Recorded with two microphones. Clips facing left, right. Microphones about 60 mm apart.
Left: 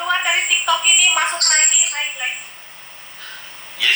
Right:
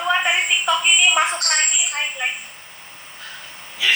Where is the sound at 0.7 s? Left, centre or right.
Left.